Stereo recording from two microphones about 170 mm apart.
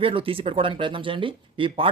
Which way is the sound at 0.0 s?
30° right (ahead or behind).